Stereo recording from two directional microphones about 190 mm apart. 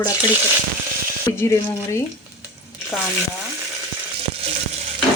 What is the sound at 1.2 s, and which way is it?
Speech, 15° left (ahead or behind).